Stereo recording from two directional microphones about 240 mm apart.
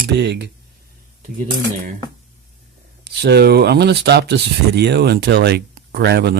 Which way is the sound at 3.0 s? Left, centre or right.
Right.